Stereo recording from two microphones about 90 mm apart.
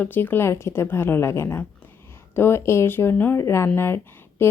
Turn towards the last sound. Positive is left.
turn(degrees=25)  # may be behind; listen again after turning